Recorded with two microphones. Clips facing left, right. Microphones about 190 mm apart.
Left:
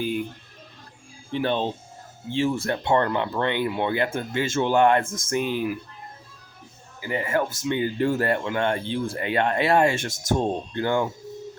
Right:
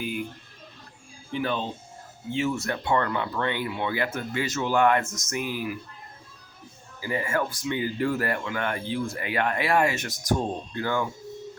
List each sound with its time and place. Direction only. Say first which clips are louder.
1.3 s speech: left 4 dB; 35° left (ahead or behind)
7.1 s speech: left 2 dB; 25° left (ahead or behind)